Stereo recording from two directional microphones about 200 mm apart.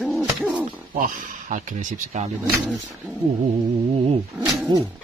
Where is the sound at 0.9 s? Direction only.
40° right (ahead or behind).